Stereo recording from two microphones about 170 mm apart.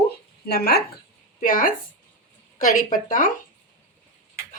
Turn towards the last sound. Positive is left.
turn(degrees=50)  # may be behind; listen again after turning